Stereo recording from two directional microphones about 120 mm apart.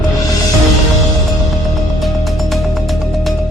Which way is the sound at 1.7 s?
Centre (ahead or behind).